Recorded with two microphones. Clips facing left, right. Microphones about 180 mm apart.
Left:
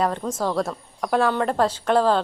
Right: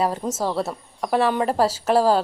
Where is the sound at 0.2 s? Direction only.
25° right (ahead or behind).